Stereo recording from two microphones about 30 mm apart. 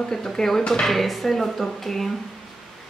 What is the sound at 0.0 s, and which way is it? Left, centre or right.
Speech, centre.